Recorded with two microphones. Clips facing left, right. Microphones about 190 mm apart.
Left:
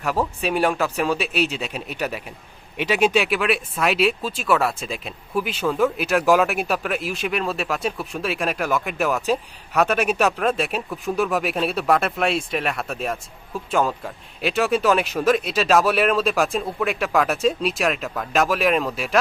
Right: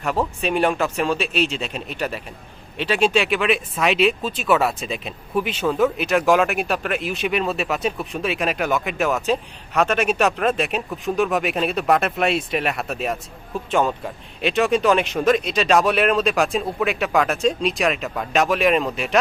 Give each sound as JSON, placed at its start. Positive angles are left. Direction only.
{"t": 0.4, "sound": "speech", "side_deg": 5}